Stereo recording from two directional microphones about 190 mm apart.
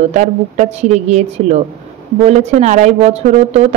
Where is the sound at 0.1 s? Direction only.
40° right (ahead or behind).